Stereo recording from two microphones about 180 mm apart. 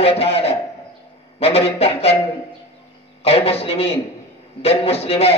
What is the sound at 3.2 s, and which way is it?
A man's voice, 35° left (ahead or behind).